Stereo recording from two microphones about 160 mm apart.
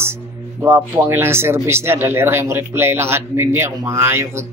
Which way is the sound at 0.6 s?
15° right (ahead or behind).